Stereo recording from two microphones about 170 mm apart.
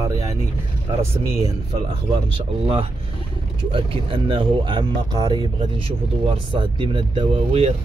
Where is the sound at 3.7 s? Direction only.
30° right (ahead or behind).